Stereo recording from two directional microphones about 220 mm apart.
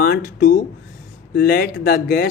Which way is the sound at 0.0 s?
45° left (ahead or behind).